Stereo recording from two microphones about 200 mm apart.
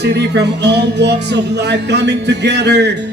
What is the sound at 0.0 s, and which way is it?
Music, 55° right (ahead or behind).